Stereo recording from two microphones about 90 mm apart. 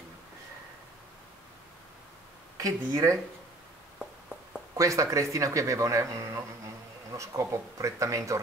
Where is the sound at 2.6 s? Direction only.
40° right (ahead or behind).